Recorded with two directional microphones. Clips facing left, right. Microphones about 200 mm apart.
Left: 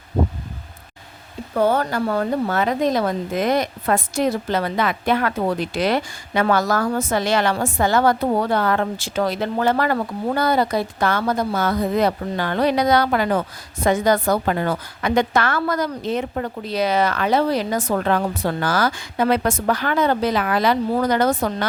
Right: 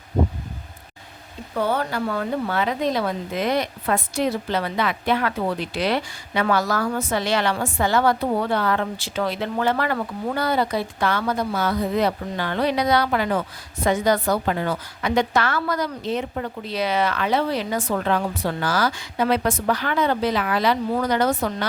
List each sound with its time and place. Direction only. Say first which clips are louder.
1.5 s speech: left 4 dB; 45° left (ahead or behind)